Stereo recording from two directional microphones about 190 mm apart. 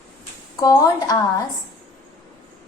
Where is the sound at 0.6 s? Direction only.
20° left (ahead or behind).